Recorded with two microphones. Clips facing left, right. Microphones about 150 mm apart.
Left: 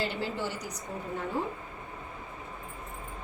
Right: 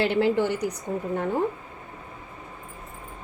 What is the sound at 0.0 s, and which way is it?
Speech, 65° right (ahead or behind).